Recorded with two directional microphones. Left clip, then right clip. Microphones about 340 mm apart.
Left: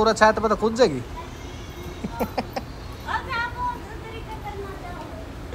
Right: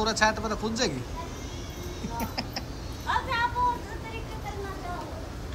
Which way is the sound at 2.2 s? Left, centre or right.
Centre.